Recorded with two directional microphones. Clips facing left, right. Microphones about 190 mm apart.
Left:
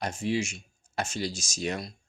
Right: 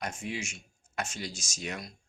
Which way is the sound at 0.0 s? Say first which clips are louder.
Left 7 dB; 35° left (ahead or behind).